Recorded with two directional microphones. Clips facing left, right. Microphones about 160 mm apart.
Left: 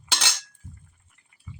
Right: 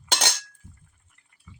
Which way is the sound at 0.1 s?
45° right (ahead or behind).